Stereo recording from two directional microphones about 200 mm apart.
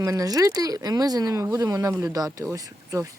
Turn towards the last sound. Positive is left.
turn(degrees=-15)  # may be behind; listen again after turning